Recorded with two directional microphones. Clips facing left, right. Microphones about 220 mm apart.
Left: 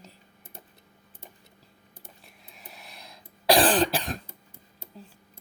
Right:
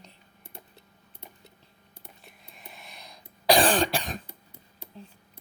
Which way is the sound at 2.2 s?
Centre (ahead or behind).